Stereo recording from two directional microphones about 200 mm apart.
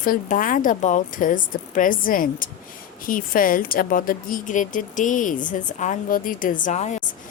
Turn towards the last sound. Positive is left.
turn(degrees=35)  # may be behind; listen again after turning